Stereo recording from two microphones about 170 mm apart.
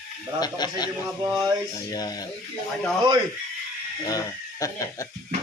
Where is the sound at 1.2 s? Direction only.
25° right (ahead or behind).